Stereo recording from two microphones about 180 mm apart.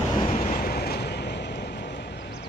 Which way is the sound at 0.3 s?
50° left (ahead or behind).